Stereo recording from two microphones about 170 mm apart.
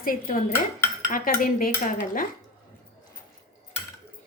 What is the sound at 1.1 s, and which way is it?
Cutlery, 55° left (ahead or behind).